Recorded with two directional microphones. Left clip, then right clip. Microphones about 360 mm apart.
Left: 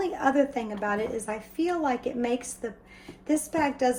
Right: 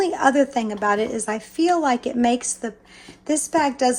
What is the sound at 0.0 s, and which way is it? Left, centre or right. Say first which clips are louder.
A woman's voice: right 7 dB; centre.